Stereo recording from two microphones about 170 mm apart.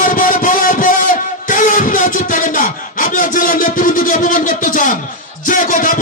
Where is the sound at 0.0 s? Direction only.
55° left (ahead or behind).